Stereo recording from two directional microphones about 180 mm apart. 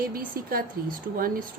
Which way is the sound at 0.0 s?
55° right (ahead or behind).